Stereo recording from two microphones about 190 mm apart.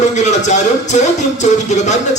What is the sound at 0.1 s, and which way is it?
A man's voice, 40° left (ahead or behind).